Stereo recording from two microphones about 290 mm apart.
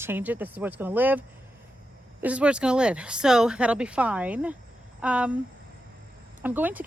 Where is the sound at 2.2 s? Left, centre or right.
Centre.